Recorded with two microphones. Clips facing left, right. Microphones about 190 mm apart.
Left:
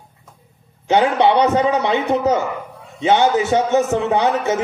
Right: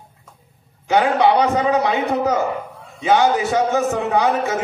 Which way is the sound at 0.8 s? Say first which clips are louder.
Left 1 dB; 25° left (ahead or behind).